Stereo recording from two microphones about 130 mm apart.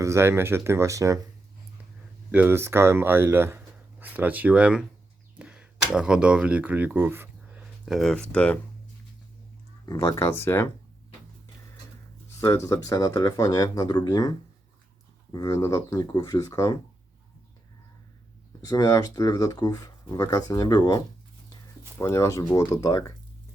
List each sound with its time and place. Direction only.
0.0 s speech: 20° right (ahead or behind)
2.3 s speech: 15° right (ahead or behind)
7.9 s speech: centre (ahead or behind)
9.9 s speech: 25° left (ahead or behind)
12.4 s speech: 25° left (ahead or behind)
18.6 s speech: 30° left (ahead or behind)
21.9 s speech: 20° left (ahead or behind)